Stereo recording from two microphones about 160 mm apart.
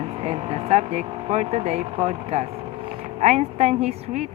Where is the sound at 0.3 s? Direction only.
40° right (ahead or behind).